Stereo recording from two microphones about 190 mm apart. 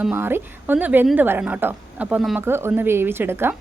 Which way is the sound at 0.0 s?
10° right (ahead or behind).